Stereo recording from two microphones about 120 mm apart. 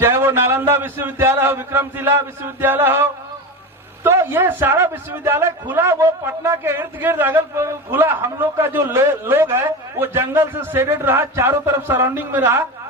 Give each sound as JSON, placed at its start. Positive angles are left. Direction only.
{"t": 0.0, "sound": "a man's voice", "side_deg": -20}